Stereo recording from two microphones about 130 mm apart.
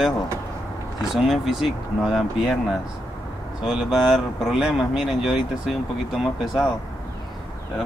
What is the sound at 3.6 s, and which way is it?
Speech, 5° right (ahead or behind).